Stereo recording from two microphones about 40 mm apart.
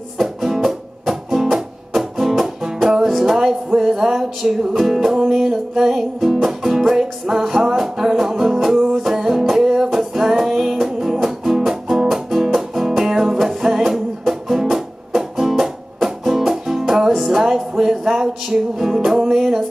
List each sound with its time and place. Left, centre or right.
0.2 s music: centre